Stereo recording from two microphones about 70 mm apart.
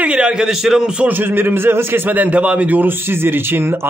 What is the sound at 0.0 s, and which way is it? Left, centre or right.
A man's voice, centre.